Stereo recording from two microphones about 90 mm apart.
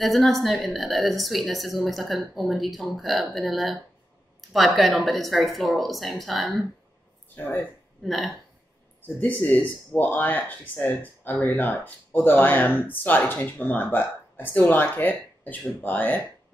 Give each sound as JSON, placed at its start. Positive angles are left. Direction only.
{"t": 0.0, "sound": "a woman's voice", "side_deg": 0}
{"t": 7.3, "sound": "speech", "side_deg": 20}
{"t": 8.0, "sound": "speech", "side_deg": 0}
{"t": 9.2, "sound": "speech", "side_deg": 20}